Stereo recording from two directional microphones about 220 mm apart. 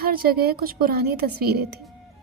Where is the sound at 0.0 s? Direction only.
40° right (ahead or behind).